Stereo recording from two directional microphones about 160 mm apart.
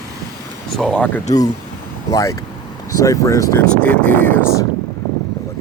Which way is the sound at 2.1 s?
20° left (ahead or behind).